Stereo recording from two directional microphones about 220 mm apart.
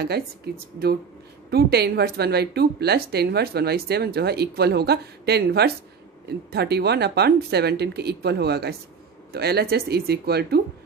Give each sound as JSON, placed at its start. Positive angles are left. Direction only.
{"t": 0.5, "sound": "speech", "side_deg": -45}